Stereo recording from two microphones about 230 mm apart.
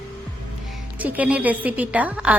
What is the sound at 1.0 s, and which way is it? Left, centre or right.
A woman's voice, centre.